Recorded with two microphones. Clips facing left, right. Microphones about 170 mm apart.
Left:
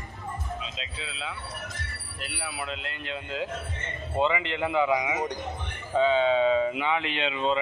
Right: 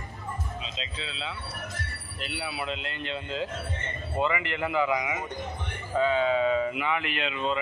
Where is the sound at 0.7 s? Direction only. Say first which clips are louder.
Right 1 dB; 10° left (ahead or behind).